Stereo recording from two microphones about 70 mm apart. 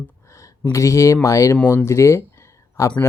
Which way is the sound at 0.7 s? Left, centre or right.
Left.